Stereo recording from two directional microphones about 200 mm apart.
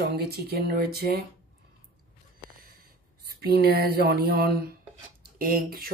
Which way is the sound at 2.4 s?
50° right (ahead or behind).